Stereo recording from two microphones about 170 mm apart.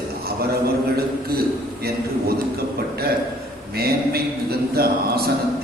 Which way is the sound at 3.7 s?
65° right (ahead or behind).